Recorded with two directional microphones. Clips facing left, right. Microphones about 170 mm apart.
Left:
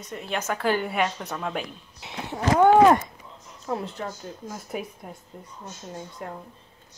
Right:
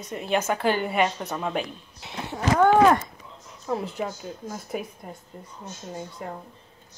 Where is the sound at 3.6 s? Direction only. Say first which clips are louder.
Right 2 dB; 5° right (ahead or behind).